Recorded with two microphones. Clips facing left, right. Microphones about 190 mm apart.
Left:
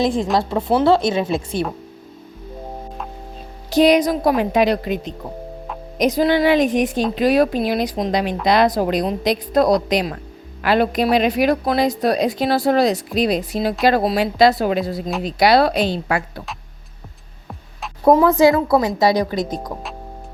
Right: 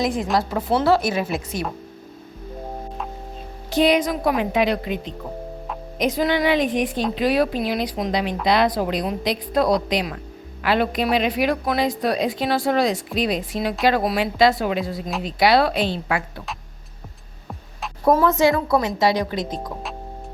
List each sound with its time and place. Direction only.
0.3 s a woman's voice: 20° left (ahead or behind)
3.7 s a woman's voice: 40° left (ahead or behind)
18.0 s a woman's voice: 20° left (ahead or behind)
18.3 s a woman's voice: 35° left (ahead or behind)